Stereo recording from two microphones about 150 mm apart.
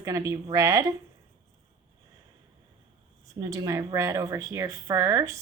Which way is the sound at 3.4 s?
20° right (ahead or behind).